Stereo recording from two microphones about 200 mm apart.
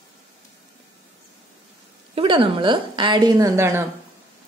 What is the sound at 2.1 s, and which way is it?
A woman's voice, 25° right (ahead or behind).